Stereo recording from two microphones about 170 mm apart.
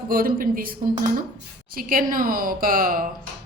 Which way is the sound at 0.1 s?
55° right (ahead or behind).